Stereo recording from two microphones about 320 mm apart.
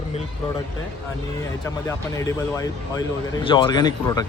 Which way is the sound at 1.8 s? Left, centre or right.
Centre.